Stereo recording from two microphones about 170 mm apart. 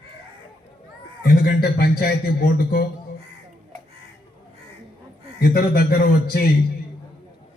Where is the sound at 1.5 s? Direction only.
65° left (ahead or behind).